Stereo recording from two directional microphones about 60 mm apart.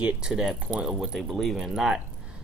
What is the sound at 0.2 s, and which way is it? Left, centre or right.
Speech, centre.